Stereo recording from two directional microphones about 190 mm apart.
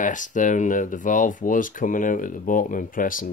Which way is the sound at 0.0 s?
40° left (ahead or behind).